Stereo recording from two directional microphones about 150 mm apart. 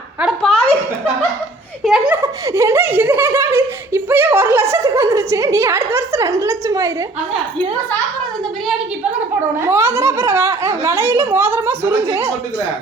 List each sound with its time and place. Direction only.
0.2 s a sound: centre (ahead or behind)
1.8 s a child's voice: 5° right (ahead or behind)
2.2 s speech: 20° right (ahead or behind)
9.6 s speech: 15° right (ahead or behind)